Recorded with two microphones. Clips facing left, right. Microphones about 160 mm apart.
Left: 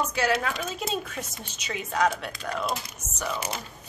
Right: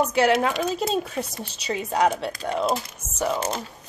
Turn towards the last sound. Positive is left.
turn(degrees=-30)  # may be behind; listen again after turning